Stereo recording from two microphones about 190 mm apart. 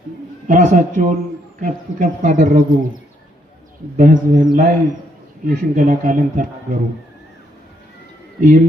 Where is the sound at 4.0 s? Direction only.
40° right (ahead or behind).